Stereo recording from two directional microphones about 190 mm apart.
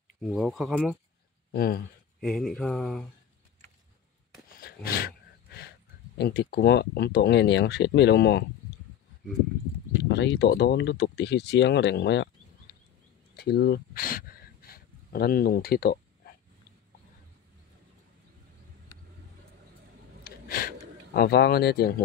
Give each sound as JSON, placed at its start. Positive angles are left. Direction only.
{"t": 0.2, "sound": "speech", "side_deg": 0}
{"t": 1.5, "sound": "speech", "side_deg": 50}
{"t": 2.1, "sound": "speech", "side_deg": 5}
{"t": 4.5, "sound": "gasp", "side_deg": 55}
{"t": 6.1, "sound": "speech", "side_deg": 60}
{"t": 10.0, "sound": "speech", "side_deg": 65}
{"t": 13.4, "sound": "speech", "side_deg": 55}
{"t": 20.2, "sound": "a sound", "side_deg": 50}
{"t": 21.1, "sound": "speech", "side_deg": 55}